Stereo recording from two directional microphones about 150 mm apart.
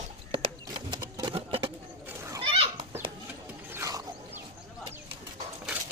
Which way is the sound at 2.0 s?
20° right (ahead or behind).